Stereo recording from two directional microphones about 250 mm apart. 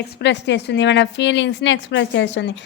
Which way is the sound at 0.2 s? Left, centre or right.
Left.